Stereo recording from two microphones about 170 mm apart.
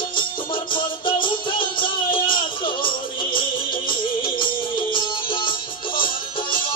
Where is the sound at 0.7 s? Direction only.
30° left (ahead or behind).